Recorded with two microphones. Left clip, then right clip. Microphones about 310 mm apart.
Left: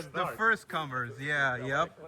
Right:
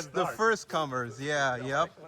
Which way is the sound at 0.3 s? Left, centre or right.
Centre.